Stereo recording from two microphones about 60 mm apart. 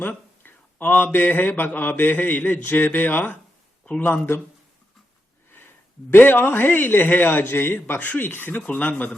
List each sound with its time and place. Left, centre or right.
0.0 s a man's voice: left
5.5 s a man's voice: left